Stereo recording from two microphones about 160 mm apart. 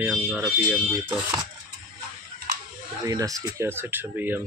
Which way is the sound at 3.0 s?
20° right (ahead or behind).